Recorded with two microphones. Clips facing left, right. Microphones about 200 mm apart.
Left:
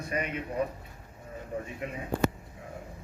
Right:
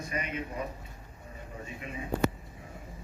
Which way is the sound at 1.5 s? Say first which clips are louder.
Left 9 dB; 55° left (ahead or behind).